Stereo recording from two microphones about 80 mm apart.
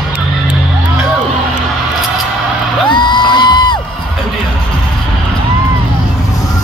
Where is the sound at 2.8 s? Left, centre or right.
Left.